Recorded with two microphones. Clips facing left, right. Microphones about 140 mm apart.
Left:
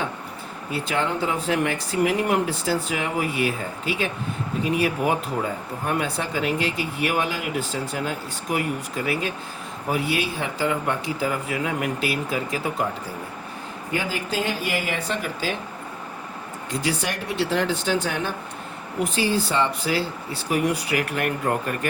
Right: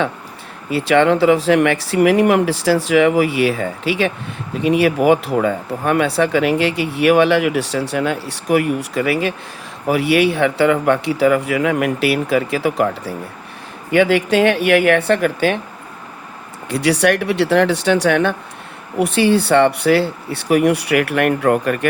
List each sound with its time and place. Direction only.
0.7 s speech: 80° right
16.6 s speech: 75° right (ahead or behind)